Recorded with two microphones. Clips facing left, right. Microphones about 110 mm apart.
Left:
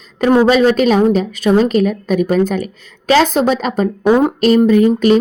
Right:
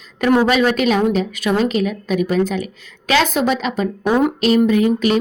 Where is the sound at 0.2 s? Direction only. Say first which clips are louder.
Left 4 dB; 30° left (ahead or behind).